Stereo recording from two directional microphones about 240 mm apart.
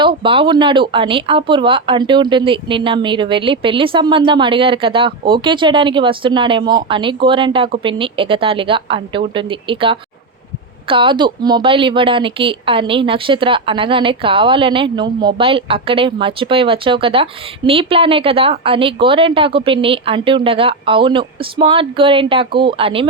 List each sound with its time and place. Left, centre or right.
0.0 s speech: right